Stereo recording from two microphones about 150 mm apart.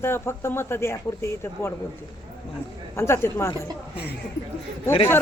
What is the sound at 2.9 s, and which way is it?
Speech, 15° left (ahead or behind).